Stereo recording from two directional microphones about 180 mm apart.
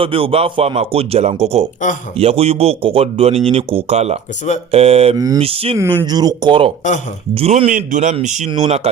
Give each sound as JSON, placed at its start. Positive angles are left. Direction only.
{"t": 0.0, "sound": "speech", "side_deg": -30}
{"t": 5.1, "sound": "speech", "side_deg": -20}
{"t": 5.4, "sound": "speech", "side_deg": -30}
{"t": 5.7, "sound": "a man's voice", "side_deg": -15}
{"t": 8.4, "sound": "speech", "side_deg": -30}